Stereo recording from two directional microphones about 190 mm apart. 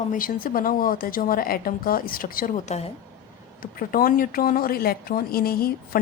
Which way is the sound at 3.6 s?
50° left (ahead or behind).